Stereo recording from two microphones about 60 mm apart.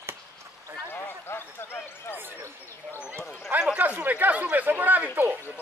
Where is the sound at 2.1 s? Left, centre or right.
Right.